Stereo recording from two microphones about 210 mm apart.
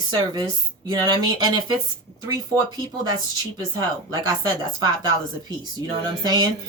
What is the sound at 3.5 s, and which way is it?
Speech, 20° right (ahead or behind).